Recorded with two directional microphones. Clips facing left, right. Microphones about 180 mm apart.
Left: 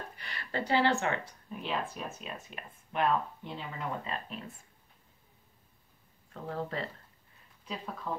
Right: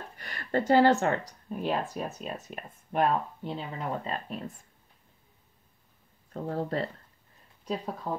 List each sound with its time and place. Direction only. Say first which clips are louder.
0.2 s speech: right 8 dB; 45° right (ahead or behind)
6.3 s speech: right 5 dB; 40° right (ahead or behind)